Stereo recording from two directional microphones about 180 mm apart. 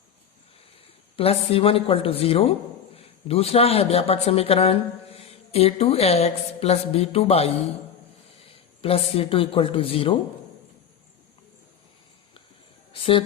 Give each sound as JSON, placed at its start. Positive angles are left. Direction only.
{"t": 1.1, "sound": "speech", "side_deg": 30}
{"t": 8.8, "sound": "speech", "side_deg": 30}
{"t": 12.9, "sound": "speech", "side_deg": 30}